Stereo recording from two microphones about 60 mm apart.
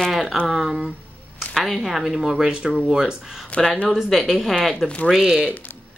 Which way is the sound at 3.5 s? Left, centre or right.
Left.